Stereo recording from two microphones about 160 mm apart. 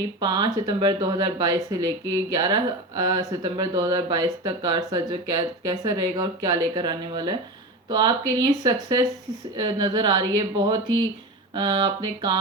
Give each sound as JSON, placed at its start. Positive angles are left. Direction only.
{"t": 0.2, "sound": "speech", "side_deg": -25}